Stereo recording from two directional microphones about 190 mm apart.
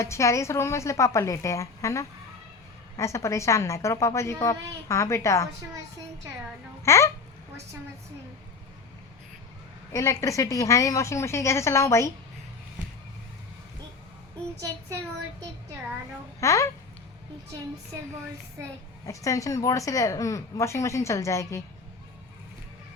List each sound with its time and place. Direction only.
0.0 s a woman's voice: 15° left (ahead or behind)
6.8 s a woman's voice: 15° left (ahead or behind)
9.9 s a woman's voice: 15° left (ahead or behind)
16.4 s a woman's voice: 15° left (ahead or behind)
19.0 s a woman's voice: 15° left (ahead or behind)